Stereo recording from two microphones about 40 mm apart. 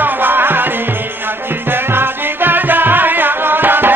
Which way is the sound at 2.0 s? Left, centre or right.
Right.